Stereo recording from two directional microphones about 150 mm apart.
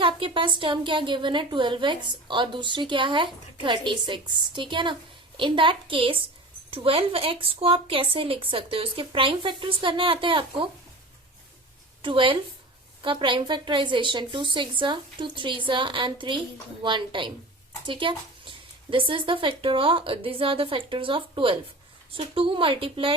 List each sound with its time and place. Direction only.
0.0 s a woman's voice: 35° right (ahead or behind)
12.0 s a woman's voice: 35° right (ahead or behind)